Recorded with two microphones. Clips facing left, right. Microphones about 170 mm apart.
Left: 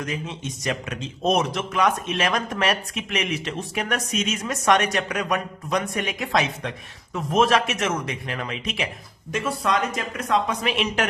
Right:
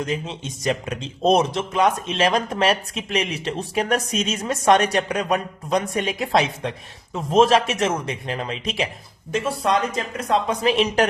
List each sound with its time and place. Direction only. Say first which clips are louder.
0.0 s speech: right 3 dB; 30° right (ahead or behind)